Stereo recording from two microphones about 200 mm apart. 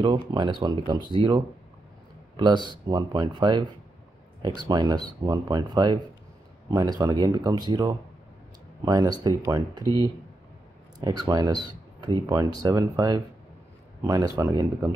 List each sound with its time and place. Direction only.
0.0 s speech: 25° right (ahead or behind)